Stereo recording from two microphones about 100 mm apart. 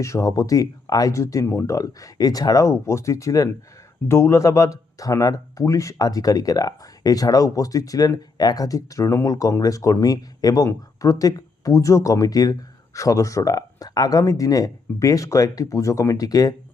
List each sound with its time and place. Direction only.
0.0 s speech: 30° left (ahead or behind)